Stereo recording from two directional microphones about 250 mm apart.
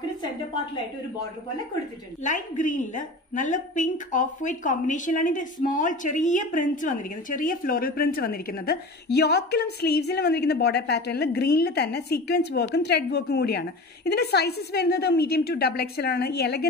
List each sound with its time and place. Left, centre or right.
2.2 s a woman's voice: left